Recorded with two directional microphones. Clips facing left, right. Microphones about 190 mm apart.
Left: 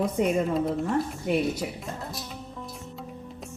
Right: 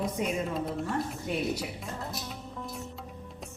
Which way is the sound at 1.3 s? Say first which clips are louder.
Left 8 dB; 60° left (ahead or behind).